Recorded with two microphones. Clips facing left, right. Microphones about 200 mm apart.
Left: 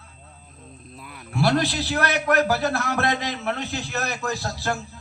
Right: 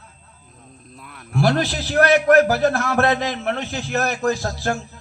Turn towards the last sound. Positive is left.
turn(degrees=-40)  # may be behind; listen again after turning